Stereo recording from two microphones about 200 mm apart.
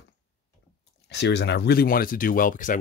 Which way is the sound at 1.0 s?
60° left (ahead or behind).